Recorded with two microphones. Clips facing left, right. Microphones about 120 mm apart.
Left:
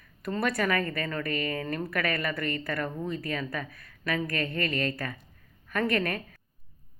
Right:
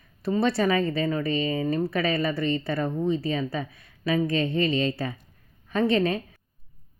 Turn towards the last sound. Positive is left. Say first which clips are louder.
# right 5 dB
turn(degrees=-25)  # may be behind; listen again after turning